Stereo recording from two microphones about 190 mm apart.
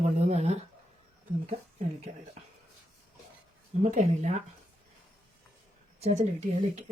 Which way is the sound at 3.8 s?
35° right (ahead or behind).